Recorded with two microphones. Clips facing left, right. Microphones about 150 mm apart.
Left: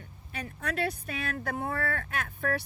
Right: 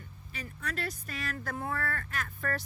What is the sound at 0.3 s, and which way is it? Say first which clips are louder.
Speech: left 6 dB; 65° left (ahead or behind).